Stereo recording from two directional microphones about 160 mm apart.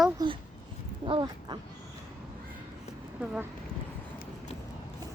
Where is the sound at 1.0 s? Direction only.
30° right (ahead or behind).